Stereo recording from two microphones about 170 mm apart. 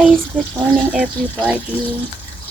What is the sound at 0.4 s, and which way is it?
Speech, 5° left (ahead or behind).